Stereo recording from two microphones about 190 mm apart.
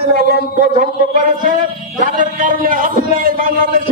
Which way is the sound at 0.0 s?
50° right (ahead or behind).